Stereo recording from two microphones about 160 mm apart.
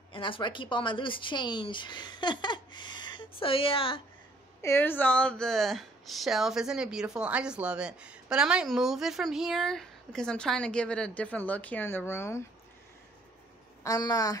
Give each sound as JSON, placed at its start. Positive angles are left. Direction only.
{"t": 0.1, "sound": "speech", "side_deg": 30}
{"t": 4.6, "sound": "a woman's voice", "side_deg": 15}
{"t": 13.8, "sound": "a woman's voice", "side_deg": 25}